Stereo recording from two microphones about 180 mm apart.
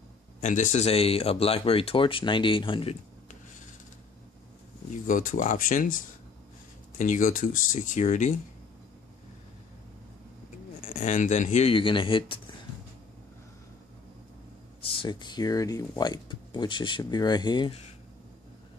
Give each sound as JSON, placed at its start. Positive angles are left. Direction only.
{"t": 0.4, "sound": "speech", "side_deg": 45}
{"t": 5.0, "sound": "speech", "side_deg": 50}
{"t": 7.0, "sound": "speech", "side_deg": 45}
{"t": 10.9, "sound": "speech", "side_deg": 40}
{"t": 14.9, "sound": "speech", "side_deg": 30}